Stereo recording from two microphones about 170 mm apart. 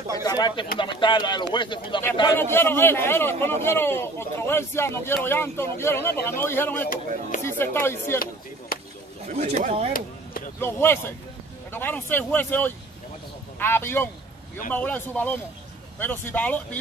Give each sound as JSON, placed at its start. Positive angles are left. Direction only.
{"t": 0.2, "sound": "speech", "side_deg": 25}
{"t": 2.3, "sound": "a man's voice", "side_deg": 15}
{"t": 6.9, "sound": "speech", "side_deg": 50}
{"t": 7.4, "sound": "speech", "side_deg": 15}
{"t": 8.7, "sound": "chop", "side_deg": 60}
{"t": 9.3, "sound": "speech", "side_deg": -40}
{"t": 9.9, "sound": "chop", "side_deg": 55}
{"t": 10.6, "sound": "a man's voice", "side_deg": 15}